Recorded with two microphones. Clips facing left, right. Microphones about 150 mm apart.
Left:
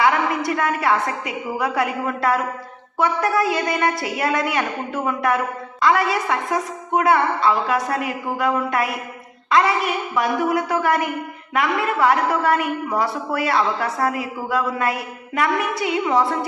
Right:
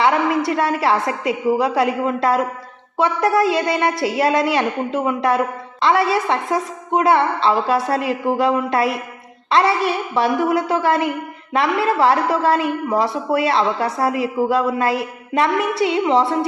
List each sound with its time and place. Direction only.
0.0 s a woman's voice: 25° right (ahead or behind)